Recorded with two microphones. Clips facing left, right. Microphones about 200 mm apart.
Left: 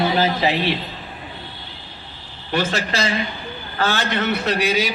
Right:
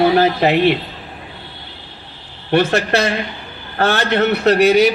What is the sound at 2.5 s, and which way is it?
A man's voice, 60° right (ahead or behind).